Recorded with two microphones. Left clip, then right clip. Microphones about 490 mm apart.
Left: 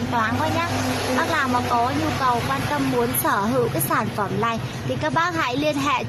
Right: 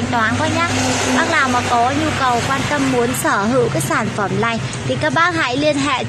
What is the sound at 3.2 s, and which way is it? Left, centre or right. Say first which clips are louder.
A woman's voice: right 5 dB; left.